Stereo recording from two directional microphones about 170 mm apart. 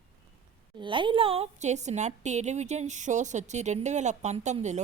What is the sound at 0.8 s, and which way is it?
A woman's voice, 30° right (ahead or behind).